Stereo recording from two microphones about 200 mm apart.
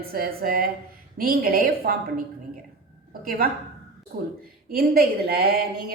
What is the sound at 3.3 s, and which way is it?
A woman's voice, 45° right (ahead or behind).